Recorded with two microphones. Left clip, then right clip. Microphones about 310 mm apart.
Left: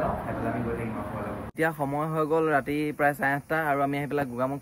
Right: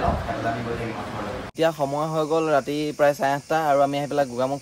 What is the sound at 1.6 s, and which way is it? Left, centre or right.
Speech, centre.